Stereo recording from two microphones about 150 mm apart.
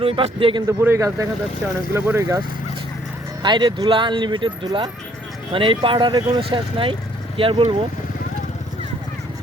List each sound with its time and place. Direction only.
0.0 s speech: 35° right (ahead or behind)
0.8 s speech: 20° right (ahead or behind)
3.4 s speech: 30° right (ahead or behind)